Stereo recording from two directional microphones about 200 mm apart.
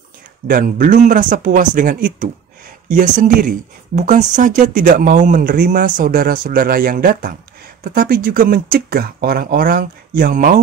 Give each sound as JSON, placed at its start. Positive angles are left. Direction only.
{"t": 0.5, "sound": "speech", "side_deg": -45}